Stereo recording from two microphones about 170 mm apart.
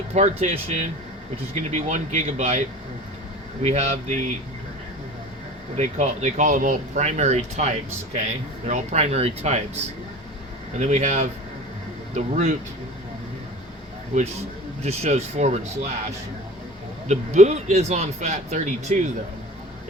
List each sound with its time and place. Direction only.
0.1 s a man's voice: 40° right (ahead or behind)
3.6 s speech: 40° right (ahead or behind)
5.7 s a man's voice: 40° right (ahead or behind)
14.1 s a man's voice: 45° right (ahead or behind)
17.1 s a man's voice: 40° right (ahead or behind)